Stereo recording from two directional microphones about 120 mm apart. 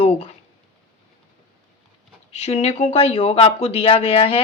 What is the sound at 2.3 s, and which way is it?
Speech, 60° left (ahead or behind).